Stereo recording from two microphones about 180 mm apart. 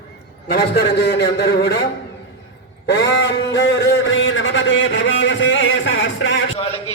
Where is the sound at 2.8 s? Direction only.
70° left (ahead or behind); by 6.4 s 90° left.